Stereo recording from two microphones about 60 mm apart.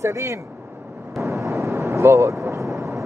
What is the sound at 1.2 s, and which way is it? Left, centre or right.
Vehicle, right.